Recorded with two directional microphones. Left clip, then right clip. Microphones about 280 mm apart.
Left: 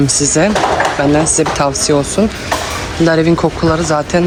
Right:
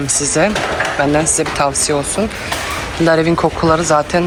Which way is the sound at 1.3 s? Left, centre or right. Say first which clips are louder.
Left 2 dB; centre.